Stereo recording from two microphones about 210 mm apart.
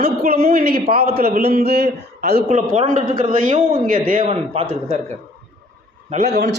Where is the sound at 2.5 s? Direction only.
35° right (ahead or behind).